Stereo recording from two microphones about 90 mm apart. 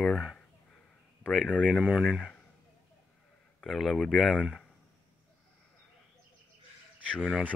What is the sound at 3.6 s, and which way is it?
Speech, centre (ahead or behind).